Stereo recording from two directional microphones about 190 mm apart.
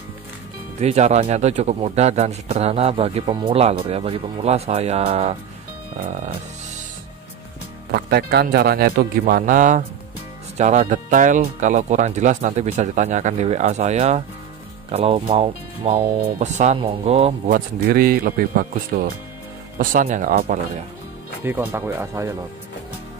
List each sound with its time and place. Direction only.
0.7 s speech: 35° right (ahead or behind)
7.9 s speech: 55° right (ahead or behind); by 17.3 s 30° right (ahead or behind)
17.5 s speech: 50° right (ahead or behind)
21.7 s speech: 15° right (ahead or behind)